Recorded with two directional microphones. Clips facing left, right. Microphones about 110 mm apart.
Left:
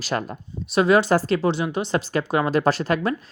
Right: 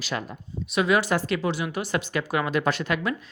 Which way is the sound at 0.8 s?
35° left (ahead or behind).